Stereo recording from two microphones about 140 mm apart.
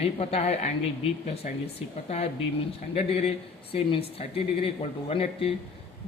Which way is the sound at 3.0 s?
45° left (ahead or behind).